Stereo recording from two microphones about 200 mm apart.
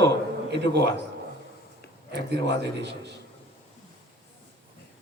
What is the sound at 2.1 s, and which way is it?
A man's voice, 60° right (ahead or behind).